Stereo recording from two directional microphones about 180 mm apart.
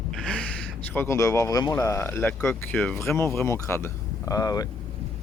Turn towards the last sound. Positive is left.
turn(degrees=20)  # may be behind; listen again after turning